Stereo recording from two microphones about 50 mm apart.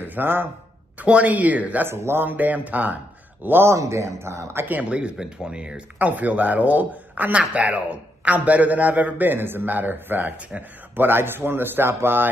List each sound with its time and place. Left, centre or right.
0.0 s speech: right
0.9 s speech: right
1.9 s speech: right
2.2 s speech: right
3.4 s speech: right
3.7 s speech: right
4.8 s speech: right
5.9 s speech: right
10.5 s speech: right
11.0 s speech: right